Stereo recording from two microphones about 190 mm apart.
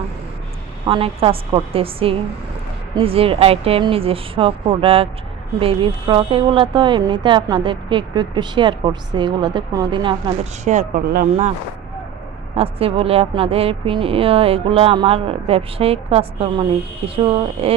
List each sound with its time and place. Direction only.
0.9 s speech: 30° right (ahead or behind)
10.7 s speech: 40° right (ahead or behind)
12.5 s speech: 30° right (ahead or behind)